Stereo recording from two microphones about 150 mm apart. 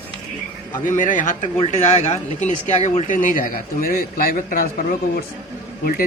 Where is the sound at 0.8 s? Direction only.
60° left (ahead or behind).